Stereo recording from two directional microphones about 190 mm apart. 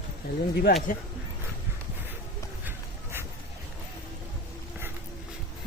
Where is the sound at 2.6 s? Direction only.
10° right (ahead or behind).